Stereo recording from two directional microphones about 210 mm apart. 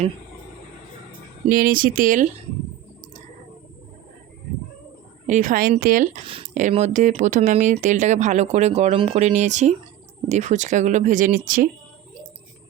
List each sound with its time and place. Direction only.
1.5 s speech: 45° right (ahead or behind)
5.2 s speech: 35° right (ahead or behind)